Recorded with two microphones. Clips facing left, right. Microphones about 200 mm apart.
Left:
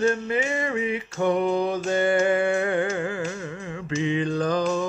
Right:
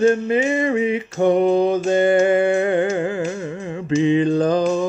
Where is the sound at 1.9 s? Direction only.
20° right (ahead or behind).